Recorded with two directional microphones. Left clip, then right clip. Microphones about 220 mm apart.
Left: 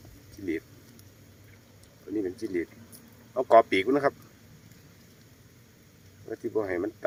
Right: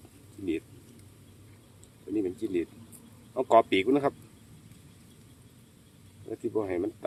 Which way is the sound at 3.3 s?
10° right (ahead or behind).